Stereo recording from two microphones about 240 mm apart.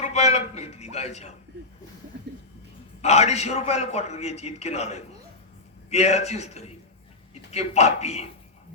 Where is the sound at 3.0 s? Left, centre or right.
Left.